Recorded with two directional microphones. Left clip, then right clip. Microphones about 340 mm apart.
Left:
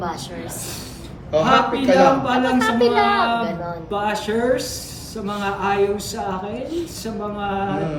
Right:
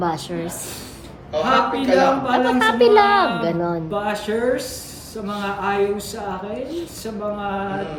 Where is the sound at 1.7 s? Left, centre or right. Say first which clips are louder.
Left 2 dB; centre.